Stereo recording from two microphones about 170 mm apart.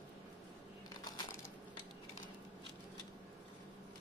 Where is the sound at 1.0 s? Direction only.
25° left (ahead or behind).